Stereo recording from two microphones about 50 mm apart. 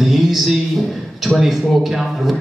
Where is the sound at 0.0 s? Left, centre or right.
Centre.